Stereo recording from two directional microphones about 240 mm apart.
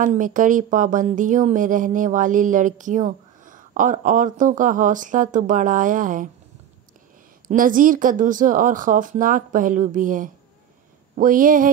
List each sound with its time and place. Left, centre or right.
0.0 s speech: right
7.4 s speech: right